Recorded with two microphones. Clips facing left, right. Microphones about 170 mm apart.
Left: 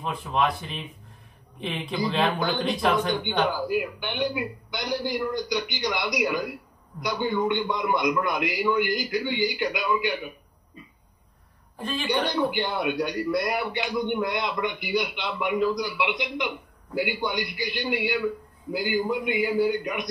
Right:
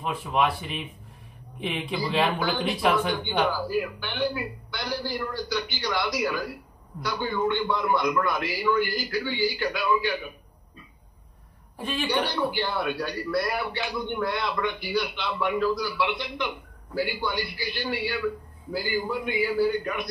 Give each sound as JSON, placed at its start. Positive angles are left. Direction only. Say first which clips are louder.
{"t": 0.0, "sound": "speech", "louder": "even", "side_deg": 0}
{"t": 3.4, "sound": "a man's voice", "louder": "left 1 dB", "side_deg": 20}
{"t": 12.3, "sound": "a man's voice", "louder": "left 2 dB", "side_deg": 20}